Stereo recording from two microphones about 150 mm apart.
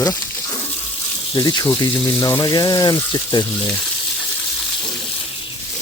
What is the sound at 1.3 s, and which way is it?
Speech, 25° left (ahead or behind).